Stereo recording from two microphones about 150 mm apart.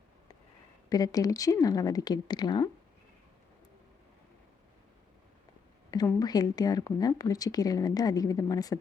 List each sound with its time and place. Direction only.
0.9 s speech: 25° left (ahead or behind)
6.1 s speech: 25° left (ahead or behind)